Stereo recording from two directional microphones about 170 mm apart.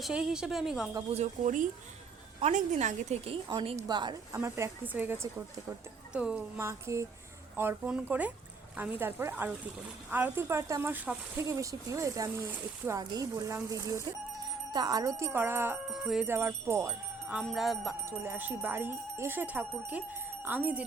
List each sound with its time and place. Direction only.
0.0 s a woman's voice: 5° right (ahead or behind)
1.1 s a woman's voice: 45° right (ahead or behind); by 17.4 s 10° right (ahead or behind)
17.4 s a woman's voice: centre (ahead or behind)
18.0 s speech: 15° right (ahead or behind)